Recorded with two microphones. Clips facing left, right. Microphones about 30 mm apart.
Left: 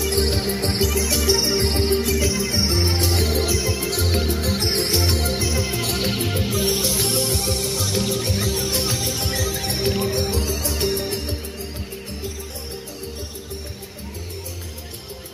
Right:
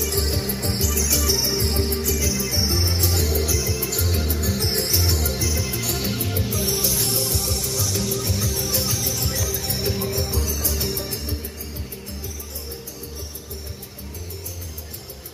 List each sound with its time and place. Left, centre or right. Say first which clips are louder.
0.0 s music: left 4 dB; left